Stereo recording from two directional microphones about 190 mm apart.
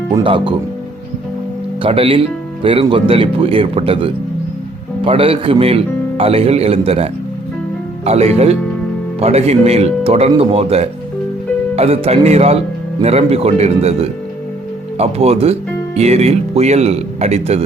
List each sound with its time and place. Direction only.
0.1 s speech: 25° right (ahead or behind)
1.8 s speech: 30° right (ahead or behind)